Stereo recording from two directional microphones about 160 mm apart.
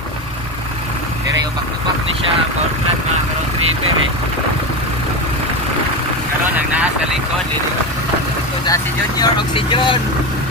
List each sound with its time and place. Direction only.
6.5 s speech: 10° right (ahead or behind)
8.6 s speech: 25° left (ahead or behind)